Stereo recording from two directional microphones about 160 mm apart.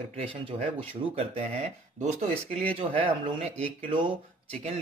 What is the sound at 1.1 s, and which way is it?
Speech, 40° right (ahead or behind).